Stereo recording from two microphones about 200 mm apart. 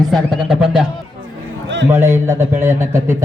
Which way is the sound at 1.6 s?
65° right (ahead or behind).